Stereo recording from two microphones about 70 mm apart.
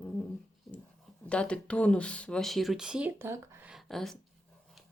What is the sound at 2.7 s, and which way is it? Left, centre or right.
Speech, centre.